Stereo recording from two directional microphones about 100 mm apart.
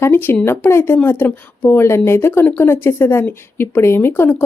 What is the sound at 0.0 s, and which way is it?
Speech, 20° left (ahead or behind).